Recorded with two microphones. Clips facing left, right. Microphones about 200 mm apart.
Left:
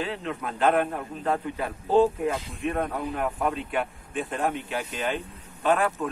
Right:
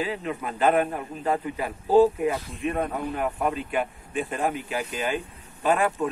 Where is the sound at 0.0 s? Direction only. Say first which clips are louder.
Right 2 dB; 5° right (ahead or behind).